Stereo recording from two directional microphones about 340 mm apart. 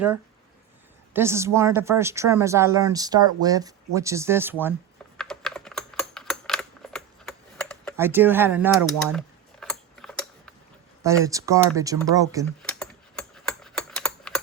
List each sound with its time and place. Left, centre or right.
1.1 s speech: centre
5.1 s typing: centre
11.0 s speech: centre
12.5 s typing: centre